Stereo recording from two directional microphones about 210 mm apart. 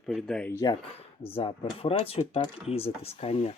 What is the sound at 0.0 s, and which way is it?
Speech, centre (ahead or behind).